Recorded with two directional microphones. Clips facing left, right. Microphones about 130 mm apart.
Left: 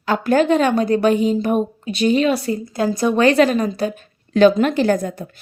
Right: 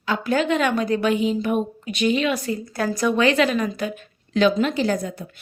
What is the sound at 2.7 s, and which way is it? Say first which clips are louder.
Speech: left 3 dB; 25° left (ahead or behind).